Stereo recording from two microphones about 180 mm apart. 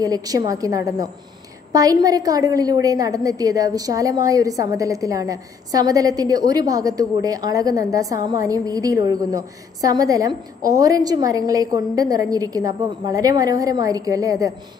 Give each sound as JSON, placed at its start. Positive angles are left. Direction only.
{"t": 0.0, "sound": "a woman's voice", "side_deg": -20}